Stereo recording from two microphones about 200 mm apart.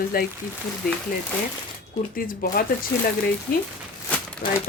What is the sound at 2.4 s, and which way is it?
Speech, 45° left (ahead or behind).